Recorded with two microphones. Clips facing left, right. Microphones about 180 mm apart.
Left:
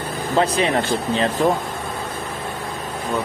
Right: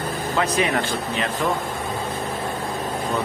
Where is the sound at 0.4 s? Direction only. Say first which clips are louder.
Left 3 dB; 30° left (ahead or behind).